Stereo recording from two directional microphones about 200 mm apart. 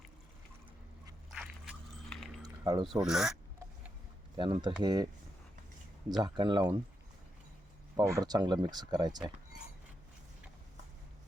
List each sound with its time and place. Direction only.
2.4 s a sound: 20° right (ahead or behind)
2.8 s speech: centre (ahead or behind)
4.4 s speech: 25° right (ahead or behind)
6.1 s speech: 20° right (ahead or behind)
7.9 s speech: 15° right (ahead or behind)